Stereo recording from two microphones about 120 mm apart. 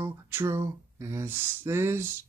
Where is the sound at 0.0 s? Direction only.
20° right (ahead or behind).